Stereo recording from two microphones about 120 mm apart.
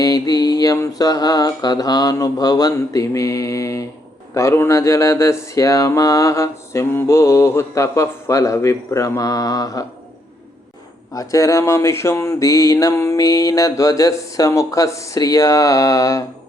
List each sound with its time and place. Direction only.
0.0 s mantra: 30° left (ahead or behind)
4.4 s speech: 20° left (ahead or behind)
11.1 s speech: 30° left (ahead or behind)